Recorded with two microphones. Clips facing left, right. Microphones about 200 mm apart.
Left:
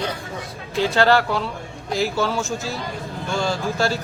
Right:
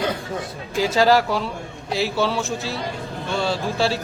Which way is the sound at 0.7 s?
5° right (ahead or behind).